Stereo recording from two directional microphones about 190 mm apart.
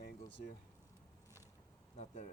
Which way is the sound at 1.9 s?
35° left (ahead or behind).